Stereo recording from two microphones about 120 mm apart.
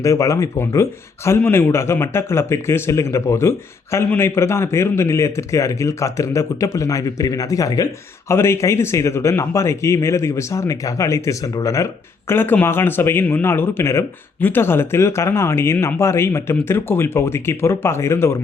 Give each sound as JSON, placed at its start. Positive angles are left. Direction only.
{"t": 0.0, "sound": "speech", "side_deg": 25}